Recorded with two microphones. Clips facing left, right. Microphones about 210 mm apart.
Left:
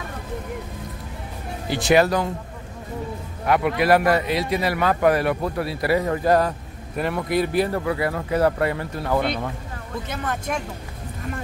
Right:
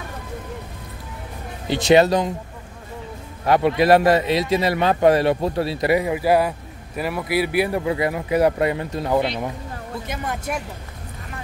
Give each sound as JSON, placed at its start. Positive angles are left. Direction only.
{"t": 1.7, "sound": "speech", "side_deg": -25}
{"t": 3.4, "sound": "speech", "side_deg": -30}